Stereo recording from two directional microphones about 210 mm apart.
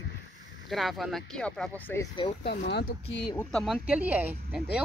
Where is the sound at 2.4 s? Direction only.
50° left (ahead or behind).